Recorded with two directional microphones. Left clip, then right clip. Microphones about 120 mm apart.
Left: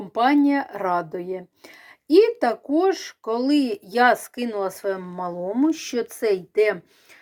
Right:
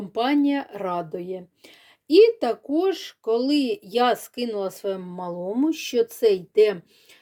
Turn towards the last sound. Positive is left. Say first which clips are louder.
# right 2 dB
turn(degrees=-35)  # may be behind; listen again after turning